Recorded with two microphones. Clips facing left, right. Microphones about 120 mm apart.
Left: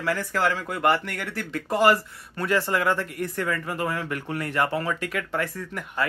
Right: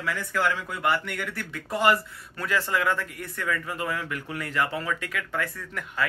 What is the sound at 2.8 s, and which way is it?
Speech, 25° left (ahead or behind).